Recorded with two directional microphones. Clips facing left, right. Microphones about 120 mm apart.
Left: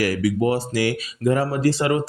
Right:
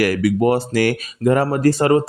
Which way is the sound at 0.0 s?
60° right (ahead or behind).